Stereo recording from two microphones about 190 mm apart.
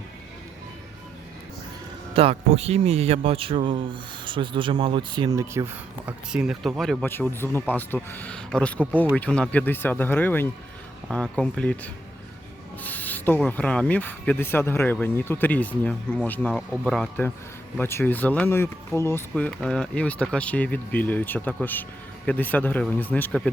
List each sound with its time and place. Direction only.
2.1 s speech: 30° right (ahead or behind)
6.1 s speech: 5° right (ahead or behind)
7.0 s speech: 10° left (ahead or behind)
19.3 s speech: 5° left (ahead or behind)